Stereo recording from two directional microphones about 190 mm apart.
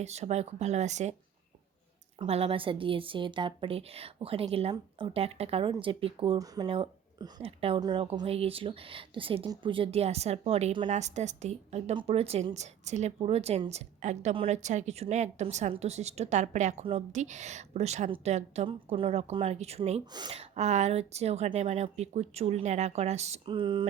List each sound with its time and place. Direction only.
0.0 s a woman's voice: 35° right (ahead or behind)
2.1 s a woman's voice: 30° right (ahead or behind)
20.1 s speech: 25° right (ahead or behind)
20.4 s a woman's voice: 35° right (ahead or behind)